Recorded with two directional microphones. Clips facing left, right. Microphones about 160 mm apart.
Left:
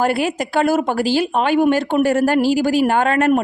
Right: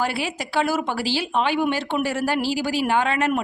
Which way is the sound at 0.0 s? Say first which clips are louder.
Left 7 dB; 50° left (ahead or behind).